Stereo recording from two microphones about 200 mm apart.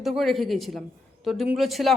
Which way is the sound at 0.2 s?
Centre (ahead or behind).